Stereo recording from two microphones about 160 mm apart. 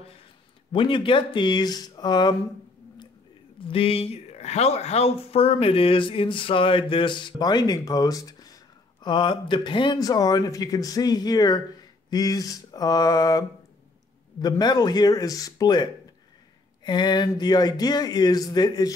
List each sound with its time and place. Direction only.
0.7 s speech: 30° left (ahead or behind)
3.6 s speech: 35° left (ahead or behind)